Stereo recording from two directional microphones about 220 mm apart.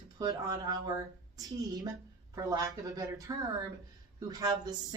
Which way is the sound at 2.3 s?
15° right (ahead or behind).